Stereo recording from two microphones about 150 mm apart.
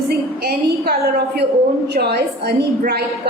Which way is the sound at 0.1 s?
90° right.